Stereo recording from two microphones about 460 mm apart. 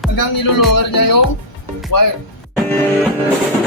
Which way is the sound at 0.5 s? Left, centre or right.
Left.